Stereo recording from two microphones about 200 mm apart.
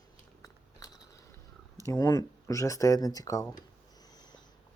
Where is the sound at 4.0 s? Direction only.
20° left (ahead or behind).